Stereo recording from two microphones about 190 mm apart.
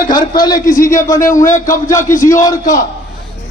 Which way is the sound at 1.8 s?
15° left (ahead or behind).